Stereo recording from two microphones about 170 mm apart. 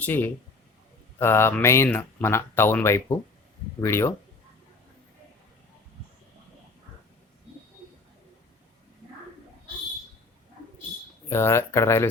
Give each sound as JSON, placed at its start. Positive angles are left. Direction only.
{"t": 0.0, "sound": "speech", "side_deg": 10}
{"t": 11.3, "sound": "speech", "side_deg": 15}